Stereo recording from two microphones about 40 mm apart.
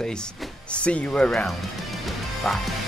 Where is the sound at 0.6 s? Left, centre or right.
Left.